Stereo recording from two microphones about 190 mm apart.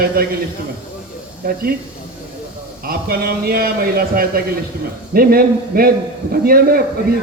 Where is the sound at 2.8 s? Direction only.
55° right (ahead or behind).